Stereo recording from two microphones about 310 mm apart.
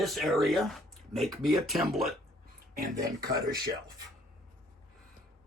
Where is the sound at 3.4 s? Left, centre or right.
Right.